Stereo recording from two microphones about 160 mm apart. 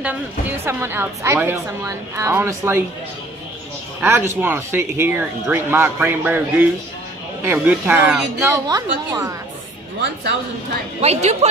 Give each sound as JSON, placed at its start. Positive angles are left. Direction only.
{"t": 0.0, "sound": "a woman's voice", "side_deg": -15}
{"t": 4.0, "sound": "a woman's voice", "side_deg": -15}
{"t": 11.0, "sound": "speech", "side_deg": -40}